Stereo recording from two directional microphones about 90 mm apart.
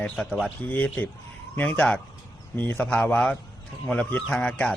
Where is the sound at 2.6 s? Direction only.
20° left (ahead or behind).